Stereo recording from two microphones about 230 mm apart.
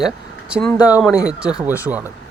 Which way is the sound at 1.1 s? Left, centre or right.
Centre.